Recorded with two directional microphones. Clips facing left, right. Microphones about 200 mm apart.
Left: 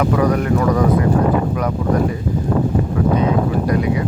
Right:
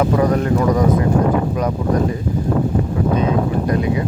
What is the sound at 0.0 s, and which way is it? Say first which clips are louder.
Speech: even; 25° right (ahead or behind).